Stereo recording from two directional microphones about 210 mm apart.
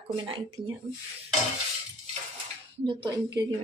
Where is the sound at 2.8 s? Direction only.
20° right (ahead or behind).